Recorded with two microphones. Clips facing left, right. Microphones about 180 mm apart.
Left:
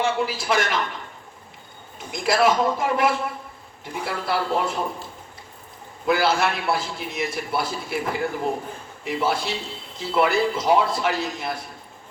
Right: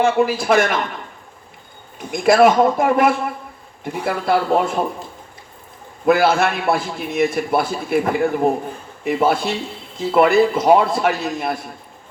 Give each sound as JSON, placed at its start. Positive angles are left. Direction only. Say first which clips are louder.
{"t": 0.0, "sound": "a man's voice", "louder": "right 7 dB", "side_deg": -55}
{"t": 2.2, "sound": "a man's voice", "louder": "right 7 dB", "side_deg": -55}
{"t": 6.1, "sound": "a man's voice", "louder": "right 6 dB", "side_deg": -55}